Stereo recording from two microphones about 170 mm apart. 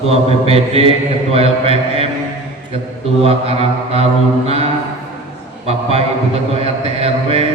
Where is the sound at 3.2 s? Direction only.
35° right (ahead or behind).